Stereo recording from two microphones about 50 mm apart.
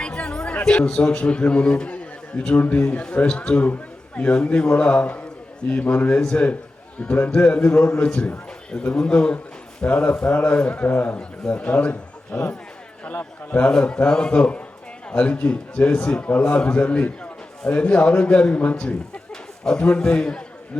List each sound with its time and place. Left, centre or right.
0.0 s chatter: left
0.9 s a man's voice: left
6.1 s a man's voice: left
10.8 s a man's voice: left
13.6 s a man's voice: left
19.3 s a sound: centre
20.0 s a man's voice: centre